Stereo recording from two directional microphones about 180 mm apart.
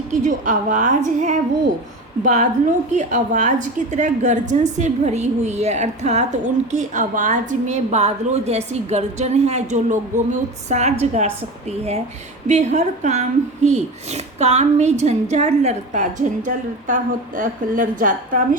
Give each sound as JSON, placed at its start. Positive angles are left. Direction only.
{"t": 0.1, "sound": "a woman's voice", "side_deg": -45}